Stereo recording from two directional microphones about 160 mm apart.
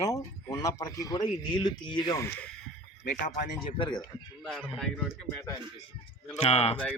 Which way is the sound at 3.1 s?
55° left (ahead or behind).